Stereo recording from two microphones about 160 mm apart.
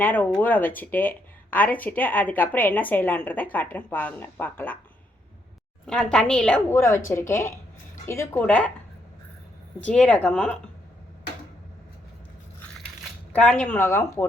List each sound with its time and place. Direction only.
0.0 s speech: 10° left (ahead or behind)
5.8 s a woman's voice: 5° left (ahead or behind)
6.7 s speech: 15° left (ahead or behind)
9.8 s speech: 5° left (ahead or behind)
13.3 s speech: 5° left (ahead or behind)